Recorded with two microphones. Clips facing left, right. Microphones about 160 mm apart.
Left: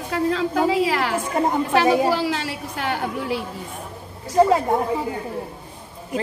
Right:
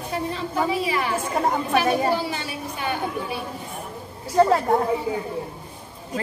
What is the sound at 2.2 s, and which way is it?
A woman's voice, 90° left.